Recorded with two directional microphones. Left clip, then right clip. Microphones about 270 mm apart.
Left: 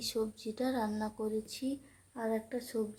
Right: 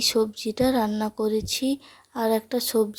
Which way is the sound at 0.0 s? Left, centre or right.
Right.